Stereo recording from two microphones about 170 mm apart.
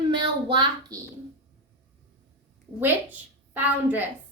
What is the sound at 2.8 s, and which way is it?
A child's voice, 10° right (ahead or behind).